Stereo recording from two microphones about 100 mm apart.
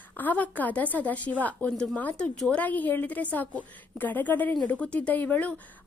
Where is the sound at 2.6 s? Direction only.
15° left (ahead or behind).